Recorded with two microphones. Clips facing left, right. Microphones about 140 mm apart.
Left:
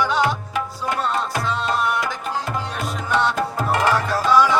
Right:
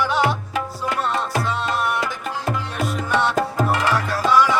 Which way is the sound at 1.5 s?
5° right (ahead or behind).